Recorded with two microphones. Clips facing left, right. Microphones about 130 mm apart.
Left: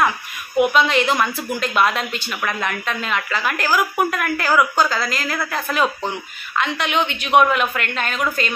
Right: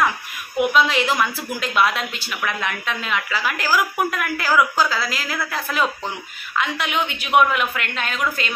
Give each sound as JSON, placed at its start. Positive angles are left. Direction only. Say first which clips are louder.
{"t": 0.6, "sound": "a woman's voice", "louder": "left 2 dB", "side_deg": -5}